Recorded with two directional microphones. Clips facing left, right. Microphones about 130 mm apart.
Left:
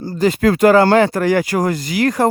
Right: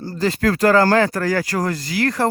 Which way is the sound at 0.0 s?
15° left (ahead or behind).